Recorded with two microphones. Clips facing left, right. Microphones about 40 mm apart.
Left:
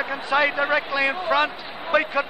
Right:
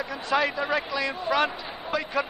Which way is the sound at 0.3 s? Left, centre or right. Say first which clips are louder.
Left 4 dB; left.